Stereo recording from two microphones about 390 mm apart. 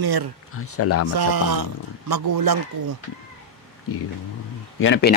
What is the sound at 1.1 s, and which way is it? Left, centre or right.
A woman's voice, right.